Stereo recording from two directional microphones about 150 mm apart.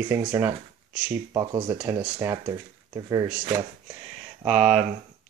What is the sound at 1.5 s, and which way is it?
Speech, 30° right (ahead or behind).